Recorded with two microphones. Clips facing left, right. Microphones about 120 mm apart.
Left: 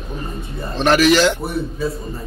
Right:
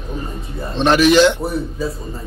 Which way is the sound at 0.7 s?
20° right (ahead or behind).